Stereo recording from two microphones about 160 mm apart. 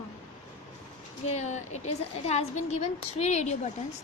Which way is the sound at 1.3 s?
45° left (ahead or behind).